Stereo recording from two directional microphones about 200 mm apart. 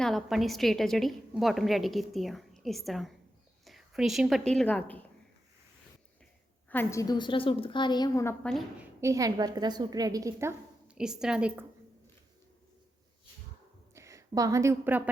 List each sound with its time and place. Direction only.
0.0 s a woman's voice: centre (ahead or behind)
6.7 s a woman's voice: 10° left (ahead or behind)
8.4 s a woman's voice: centre (ahead or behind)
9.0 s a woman's voice: 15° right (ahead or behind)
10.8 s a woman's voice: 5° right (ahead or behind)
13.9 s speech: 15° right (ahead or behind)